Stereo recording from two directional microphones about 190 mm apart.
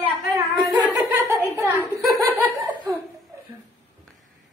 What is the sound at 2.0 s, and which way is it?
Snicker, 20° right (ahead or behind).